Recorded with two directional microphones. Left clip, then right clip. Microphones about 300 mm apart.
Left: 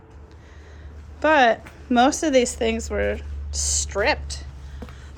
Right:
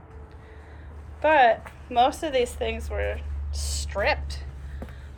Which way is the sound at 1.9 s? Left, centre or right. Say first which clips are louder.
Left 4 dB; left.